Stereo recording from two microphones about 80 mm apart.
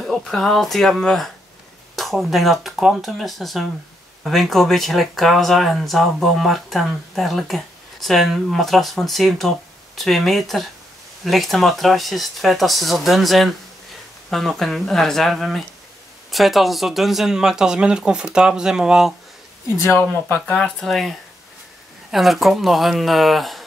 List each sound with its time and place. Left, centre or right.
0.0 s speech: centre
19.8 s speech: left
20.4 s speech: centre
22.1 s speech: centre